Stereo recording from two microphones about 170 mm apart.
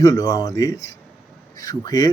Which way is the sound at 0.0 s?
20° left (ahead or behind).